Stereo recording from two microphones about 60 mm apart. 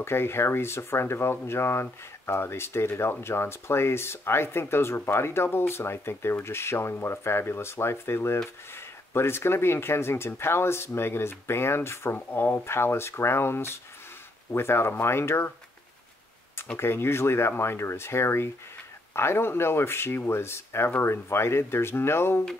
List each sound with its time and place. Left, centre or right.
0.0 s speech: left
16.7 s speech: left